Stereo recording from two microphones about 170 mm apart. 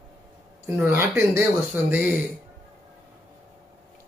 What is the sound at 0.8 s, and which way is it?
Speech, 10° right (ahead or behind).